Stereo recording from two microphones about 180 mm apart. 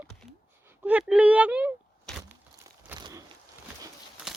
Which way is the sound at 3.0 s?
20° right (ahead or behind).